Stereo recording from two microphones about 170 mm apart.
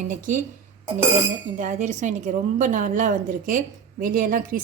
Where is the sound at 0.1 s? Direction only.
50° right (ahead or behind).